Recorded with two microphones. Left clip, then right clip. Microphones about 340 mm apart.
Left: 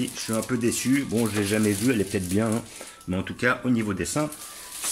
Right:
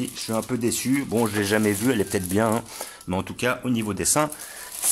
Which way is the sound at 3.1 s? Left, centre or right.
Centre.